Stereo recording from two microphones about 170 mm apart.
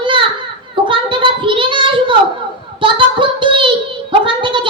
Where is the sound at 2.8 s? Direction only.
30° right (ahead or behind).